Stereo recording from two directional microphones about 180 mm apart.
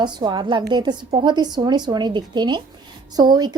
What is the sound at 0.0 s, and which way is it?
A woman's voice, 25° right (ahead or behind).